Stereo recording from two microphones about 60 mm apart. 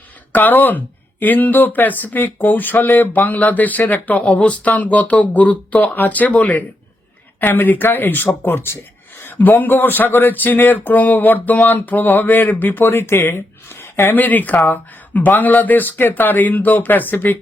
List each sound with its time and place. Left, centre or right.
0.3 s speech: left